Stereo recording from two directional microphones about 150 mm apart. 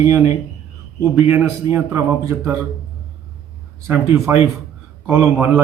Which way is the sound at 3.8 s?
15° right (ahead or behind).